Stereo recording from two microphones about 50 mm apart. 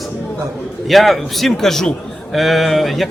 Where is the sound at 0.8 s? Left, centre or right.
Centre.